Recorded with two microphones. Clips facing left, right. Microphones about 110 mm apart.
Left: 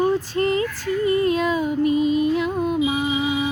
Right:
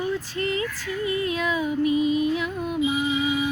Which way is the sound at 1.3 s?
40° left (ahead or behind).